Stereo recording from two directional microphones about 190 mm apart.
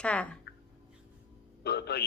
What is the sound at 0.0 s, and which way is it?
Speech, 5° left (ahead or behind).